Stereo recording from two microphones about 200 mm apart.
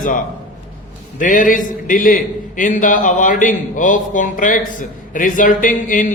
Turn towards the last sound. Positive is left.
turn(degrees=40)  # may be behind; listen again after turning